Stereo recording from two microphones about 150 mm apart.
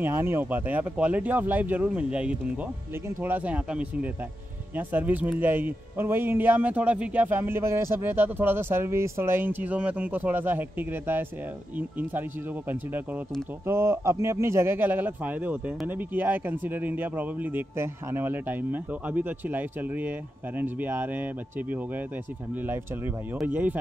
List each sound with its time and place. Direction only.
0.0 s speech: 15° right (ahead or behind)